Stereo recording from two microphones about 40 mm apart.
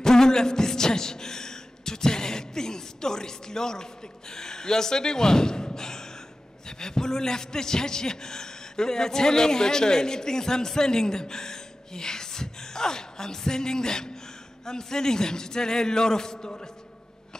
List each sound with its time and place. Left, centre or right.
0.0 s a man's voice: centre